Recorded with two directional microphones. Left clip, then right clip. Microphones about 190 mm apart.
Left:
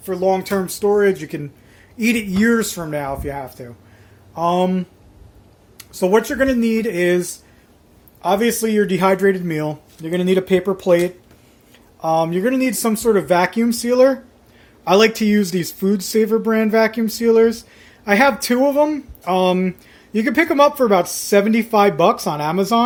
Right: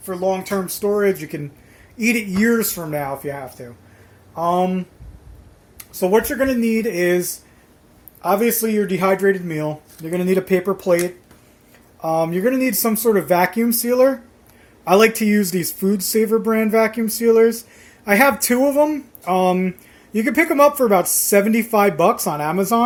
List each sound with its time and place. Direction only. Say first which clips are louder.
0.0 s speech: left 3 dB; 25° left (ahead or behind); by 7.2 s 5° left (ahead or behind)
8.2 s speech: left 1 dB; 5° left (ahead or behind)